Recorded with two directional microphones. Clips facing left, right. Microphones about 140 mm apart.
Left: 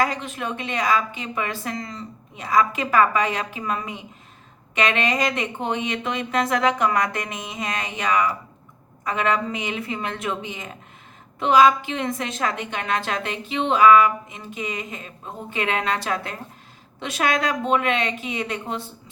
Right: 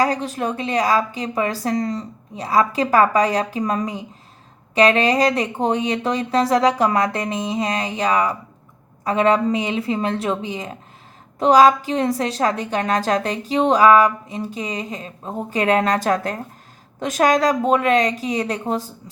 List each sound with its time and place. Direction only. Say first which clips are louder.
0.0 s a woman's voice: right 4 dB; 35° right (ahead or behind)